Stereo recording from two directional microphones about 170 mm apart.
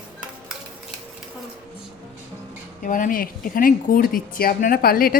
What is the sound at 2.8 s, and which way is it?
Speech, 50° left (ahead or behind).